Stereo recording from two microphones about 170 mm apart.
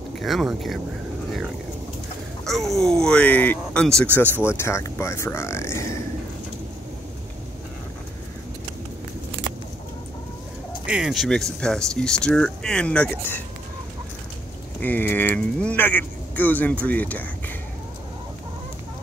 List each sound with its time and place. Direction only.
0.2 s speech: centre (ahead or behind)
2.4 s a sound: centre (ahead or behind)
2.8 s speech: 5° left (ahead or behind)
4.5 s speech: 15° left (ahead or behind)
10.9 s speech: 5° right (ahead or behind)
14.8 s speech: 10° left (ahead or behind)